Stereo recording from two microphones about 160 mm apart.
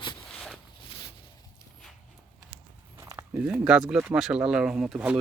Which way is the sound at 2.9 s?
20° right (ahead or behind).